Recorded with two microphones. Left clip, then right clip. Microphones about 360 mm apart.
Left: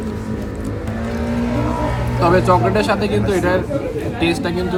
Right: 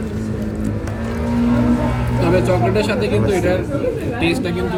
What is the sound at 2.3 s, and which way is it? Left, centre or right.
Speech, centre.